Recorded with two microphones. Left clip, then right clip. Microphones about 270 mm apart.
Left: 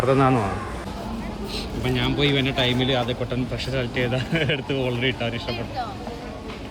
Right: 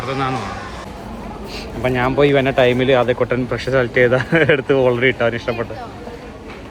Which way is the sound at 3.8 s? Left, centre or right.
Right.